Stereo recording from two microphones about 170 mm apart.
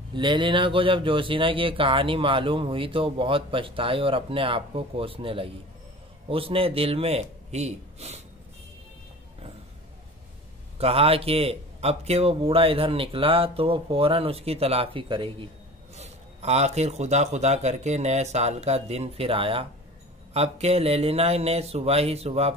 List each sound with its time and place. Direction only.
0.1 s speech: 30° right (ahead or behind)
10.8 s speech: 35° right (ahead or behind)